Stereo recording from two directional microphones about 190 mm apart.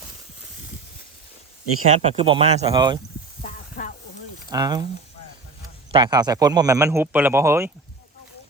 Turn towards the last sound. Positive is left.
turn(degrees=-15)  # may be behind; listen again after turning